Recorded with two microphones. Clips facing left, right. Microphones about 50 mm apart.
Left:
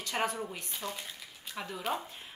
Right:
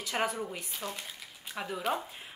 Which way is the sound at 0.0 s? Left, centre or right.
Centre.